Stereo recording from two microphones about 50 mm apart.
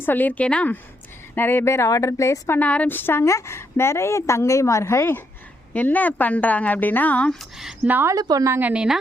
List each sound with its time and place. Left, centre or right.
0.0 s a woman's voice: left
0.4 s speech: left
1.4 s a woman's voice: left
1.6 s a woman's voice: left
2.6 s speech: left
2.8 s a woman's voice: left
3.2 s a woman's voice: left
5.7 s a woman's voice: left
7.5 s speech: centre
8.0 s speech: right
8.6 s a woman's voice: right